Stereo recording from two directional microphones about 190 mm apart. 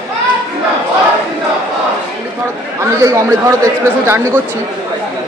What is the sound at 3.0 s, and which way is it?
Speech, 15° right (ahead or behind).